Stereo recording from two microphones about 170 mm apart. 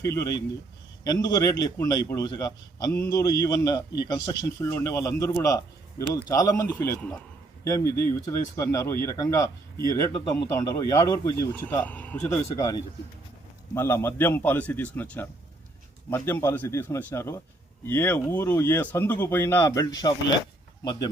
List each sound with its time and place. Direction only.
0.0 s a man's voice: 20° left (ahead or behind)
11.6 s a man's voice: 10° left (ahead or behind)